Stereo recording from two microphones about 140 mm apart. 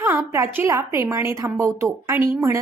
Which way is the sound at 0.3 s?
20° right (ahead or behind).